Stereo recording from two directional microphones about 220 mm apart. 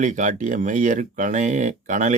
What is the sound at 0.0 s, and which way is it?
A man's voice, 35° right (ahead or behind).